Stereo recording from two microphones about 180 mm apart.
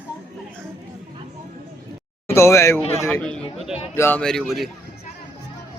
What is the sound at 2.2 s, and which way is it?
A man's voice, 15° left (ahead or behind).